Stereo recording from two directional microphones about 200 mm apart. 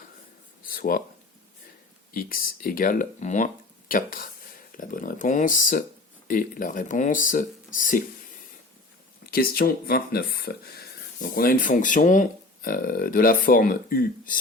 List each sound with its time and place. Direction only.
0.6 s a sound: 45° left (ahead or behind)
2.1 s speech: 45° left (ahead or behind)
9.3 s speech: 50° left (ahead or behind)